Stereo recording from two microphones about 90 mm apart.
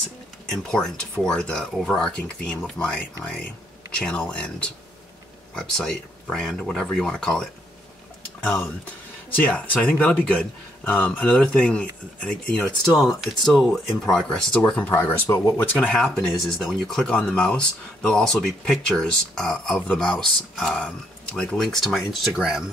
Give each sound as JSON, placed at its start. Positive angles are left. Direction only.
{"t": 0.5, "sound": "speech", "side_deg": 5}
{"t": 4.0, "sound": "speech", "side_deg": 10}
{"t": 9.3, "sound": "speech", "side_deg": 15}
{"t": 14.9, "sound": "speech", "side_deg": 25}
{"t": 15.9, "sound": "speech", "side_deg": 5}